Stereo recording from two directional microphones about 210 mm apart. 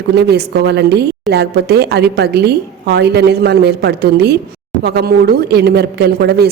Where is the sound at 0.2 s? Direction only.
50° right (ahead or behind).